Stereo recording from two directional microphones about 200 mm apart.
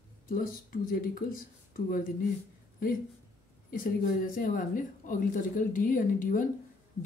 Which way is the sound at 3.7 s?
45° left (ahead or behind).